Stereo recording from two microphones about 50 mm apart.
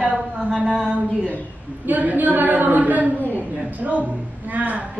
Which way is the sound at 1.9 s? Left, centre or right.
Right.